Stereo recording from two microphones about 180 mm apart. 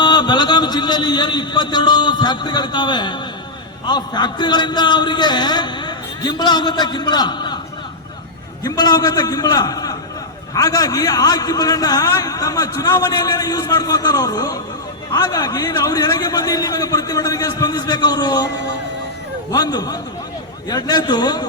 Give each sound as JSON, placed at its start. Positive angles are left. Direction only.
{"t": 0.0, "sound": "a man's voice", "side_deg": 25}
{"t": 8.6, "sound": "a man's voice", "side_deg": 20}